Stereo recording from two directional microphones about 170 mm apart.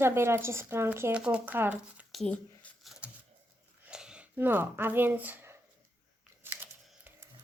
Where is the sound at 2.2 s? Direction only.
5° left (ahead or behind); by 5.5 s 10° right (ahead or behind).